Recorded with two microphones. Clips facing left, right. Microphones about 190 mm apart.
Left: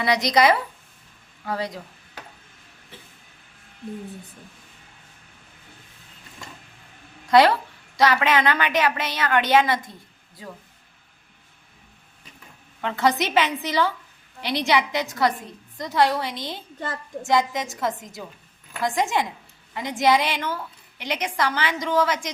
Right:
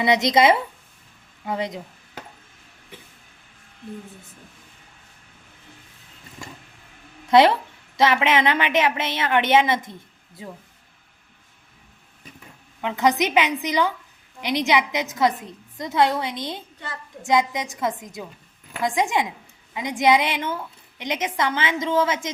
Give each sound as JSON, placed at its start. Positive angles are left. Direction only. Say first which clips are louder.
{"t": 0.0, "sound": "a woman's voice", "louder": "right 2 dB", "side_deg": -20}
{"t": 7.3, "sound": "a woman's voice", "louder": "right 1 dB", "side_deg": -20}
{"t": 12.8, "sound": "a woman's voice", "louder": "right 2 dB", "side_deg": -15}